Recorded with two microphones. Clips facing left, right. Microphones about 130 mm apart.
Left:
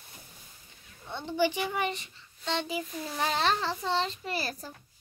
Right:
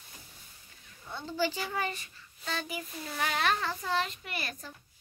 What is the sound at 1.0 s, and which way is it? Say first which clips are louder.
A child's voice: left 4 dB; 20° left (ahead or behind).